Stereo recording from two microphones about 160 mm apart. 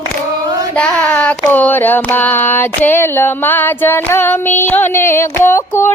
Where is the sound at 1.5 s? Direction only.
10° left (ahead or behind).